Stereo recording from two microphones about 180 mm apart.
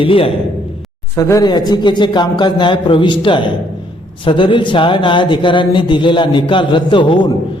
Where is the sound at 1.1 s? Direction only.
15° left (ahead or behind).